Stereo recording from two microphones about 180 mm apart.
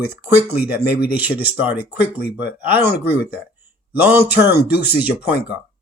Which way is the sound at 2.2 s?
60° left (ahead or behind).